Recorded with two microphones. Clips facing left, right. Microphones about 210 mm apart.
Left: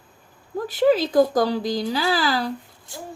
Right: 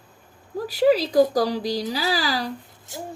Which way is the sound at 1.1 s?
50° left (ahead or behind).